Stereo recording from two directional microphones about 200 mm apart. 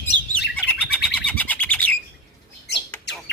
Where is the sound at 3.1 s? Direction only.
60° left (ahead or behind).